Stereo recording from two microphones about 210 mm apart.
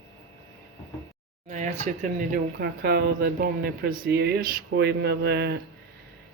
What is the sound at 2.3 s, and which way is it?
Speech, 50° right (ahead or behind).